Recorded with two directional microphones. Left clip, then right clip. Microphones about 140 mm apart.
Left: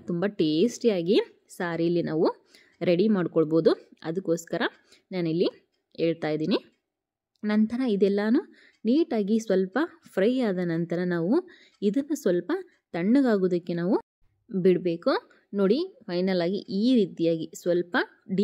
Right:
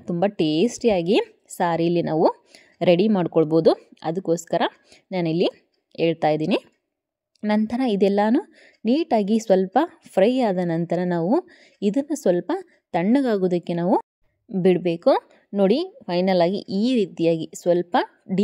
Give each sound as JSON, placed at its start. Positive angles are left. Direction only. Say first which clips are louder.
{"t": 0.0, "sound": "a woman's voice", "louder": "right 5 dB", "side_deg": -30}